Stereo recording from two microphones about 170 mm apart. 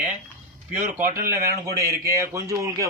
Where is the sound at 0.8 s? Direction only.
55° right (ahead or behind).